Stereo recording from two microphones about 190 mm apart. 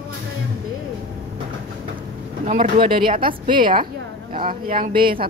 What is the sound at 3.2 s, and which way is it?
Speech, 25° right (ahead or behind).